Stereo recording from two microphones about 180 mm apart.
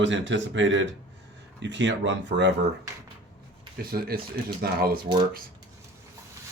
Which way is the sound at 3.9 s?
55° right (ahead or behind).